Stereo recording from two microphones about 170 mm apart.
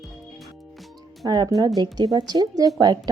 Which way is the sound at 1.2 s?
20° right (ahead or behind).